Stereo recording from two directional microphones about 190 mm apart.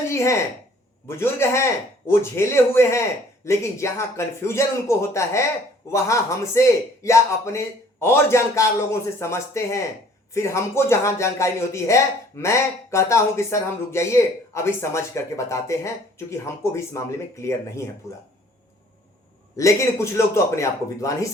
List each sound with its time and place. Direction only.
0.1 s speech: 15° left (ahead or behind)
19.5 s speech: 15° left (ahead or behind)